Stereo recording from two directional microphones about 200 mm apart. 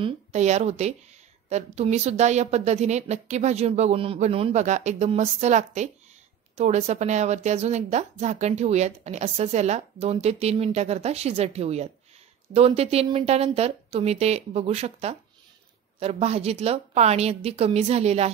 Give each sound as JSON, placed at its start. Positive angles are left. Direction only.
{"t": 0.0, "sound": "speech", "side_deg": -35}